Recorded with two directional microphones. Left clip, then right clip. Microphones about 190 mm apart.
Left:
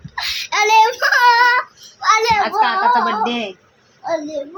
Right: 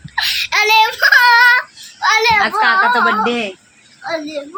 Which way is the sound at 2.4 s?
15° right (ahead or behind).